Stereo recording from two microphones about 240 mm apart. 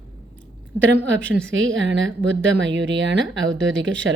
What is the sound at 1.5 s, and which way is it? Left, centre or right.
A woman's voice, right.